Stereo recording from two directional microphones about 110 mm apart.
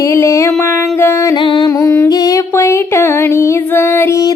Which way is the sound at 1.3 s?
45° left (ahead or behind).